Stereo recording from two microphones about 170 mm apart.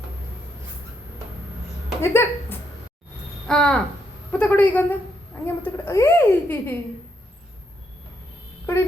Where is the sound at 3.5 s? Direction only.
5° left (ahead or behind).